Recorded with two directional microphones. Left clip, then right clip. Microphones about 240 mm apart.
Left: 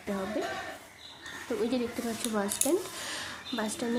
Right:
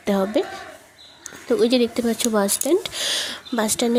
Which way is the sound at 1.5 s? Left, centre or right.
Right.